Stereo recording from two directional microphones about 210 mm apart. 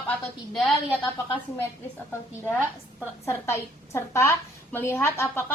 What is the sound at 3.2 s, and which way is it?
A woman's voice, 10° left (ahead or behind).